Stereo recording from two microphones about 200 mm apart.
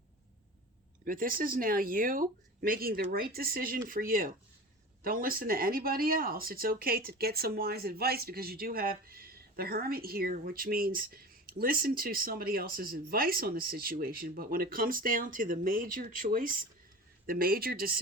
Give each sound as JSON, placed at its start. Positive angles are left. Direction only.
{"t": 1.0, "sound": "speech", "side_deg": -45}